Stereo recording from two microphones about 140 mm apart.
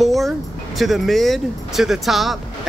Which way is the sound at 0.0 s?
Centre (ahead or behind).